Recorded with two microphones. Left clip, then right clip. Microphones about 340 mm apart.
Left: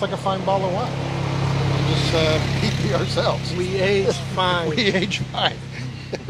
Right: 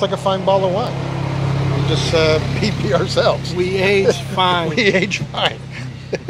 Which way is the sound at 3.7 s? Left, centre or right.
Right.